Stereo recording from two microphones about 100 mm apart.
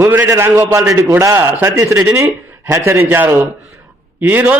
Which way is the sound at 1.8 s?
30° right (ahead or behind).